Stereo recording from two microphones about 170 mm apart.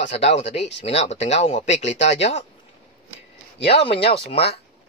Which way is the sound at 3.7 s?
35° left (ahead or behind).